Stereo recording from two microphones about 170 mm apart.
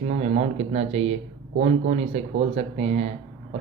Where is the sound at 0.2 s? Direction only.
40° right (ahead or behind).